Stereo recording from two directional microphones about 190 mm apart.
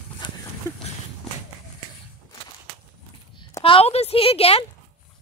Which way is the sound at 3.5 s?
30° left (ahead or behind).